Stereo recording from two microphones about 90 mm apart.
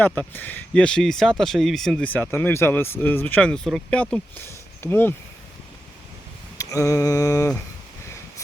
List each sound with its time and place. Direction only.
0.2 s speech: 20° left (ahead or behind); by 2.0 s 5° left (ahead or behind)
2.3 s speech: 30° left (ahead or behind)
6.6 s mantra: 35° left (ahead or behind)